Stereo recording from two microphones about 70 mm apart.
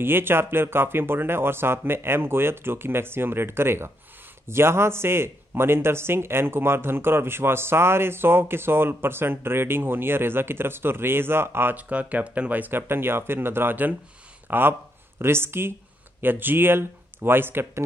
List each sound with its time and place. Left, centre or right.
0.0 s speech: right
11.7 s speech: right